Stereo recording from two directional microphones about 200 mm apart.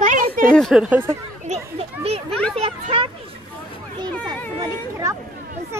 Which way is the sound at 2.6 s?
25° right (ahead or behind).